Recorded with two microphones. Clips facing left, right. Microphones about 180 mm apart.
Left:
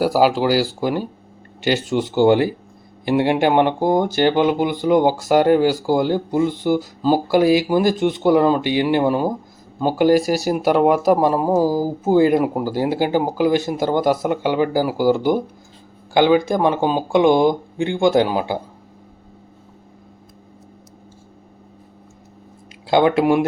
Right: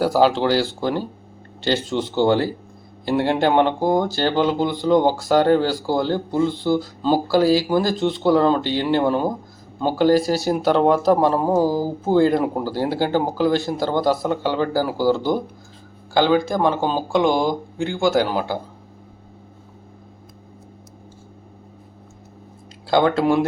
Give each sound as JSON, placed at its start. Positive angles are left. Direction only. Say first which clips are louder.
{"t": 0.0, "sound": "speech", "louder": "left 1 dB", "side_deg": 10}
{"t": 22.9, "sound": "speech", "louder": "left 2 dB", "side_deg": 15}